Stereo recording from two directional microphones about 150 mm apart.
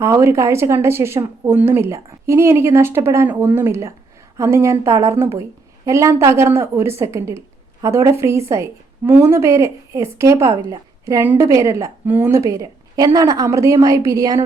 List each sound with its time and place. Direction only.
0.0 s a woman's voice: 15° right (ahead or behind)